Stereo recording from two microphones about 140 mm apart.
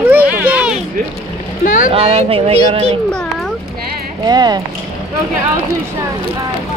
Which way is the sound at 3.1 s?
5° left (ahead or behind).